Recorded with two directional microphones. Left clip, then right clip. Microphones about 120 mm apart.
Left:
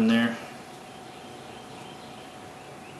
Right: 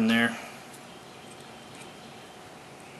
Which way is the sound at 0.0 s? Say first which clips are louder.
Even; 25° right (ahead or behind).